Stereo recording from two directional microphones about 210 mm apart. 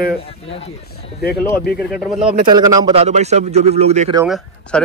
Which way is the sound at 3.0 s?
30° right (ahead or behind).